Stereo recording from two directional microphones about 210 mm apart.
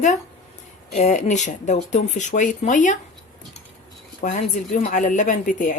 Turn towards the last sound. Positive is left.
turn(degrees=40)  # may be behind; listen again after turning